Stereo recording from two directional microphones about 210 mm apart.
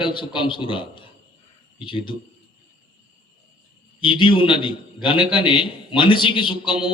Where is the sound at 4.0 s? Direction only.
25° left (ahead or behind).